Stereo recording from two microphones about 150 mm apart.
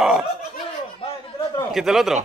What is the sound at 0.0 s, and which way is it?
Laughter, 5° right (ahead or behind).